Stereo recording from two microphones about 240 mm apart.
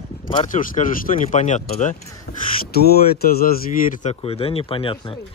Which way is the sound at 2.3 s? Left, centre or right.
Left.